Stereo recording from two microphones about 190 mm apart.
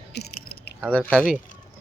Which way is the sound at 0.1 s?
60° left (ahead or behind).